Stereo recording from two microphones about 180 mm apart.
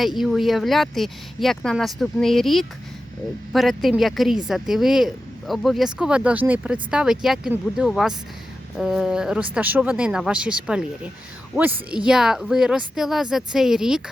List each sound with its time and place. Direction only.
0.0 s speech: centre (ahead or behind)